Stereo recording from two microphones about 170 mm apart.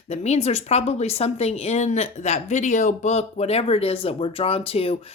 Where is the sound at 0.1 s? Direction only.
40° left (ahead or behind).